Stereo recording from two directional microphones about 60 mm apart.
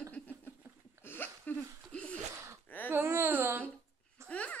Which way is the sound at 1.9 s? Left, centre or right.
Centre.